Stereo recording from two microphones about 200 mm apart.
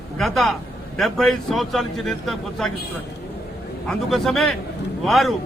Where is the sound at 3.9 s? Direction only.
Centre (ahead or behind).